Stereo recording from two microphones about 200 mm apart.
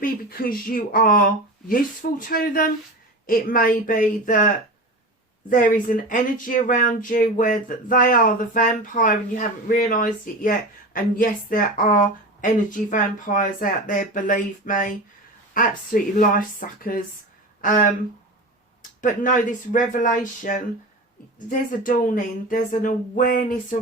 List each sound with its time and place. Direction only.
0.0 s speech: 45° left (ahead or behind)
5.5 s speech: 40° left (ahead or behind)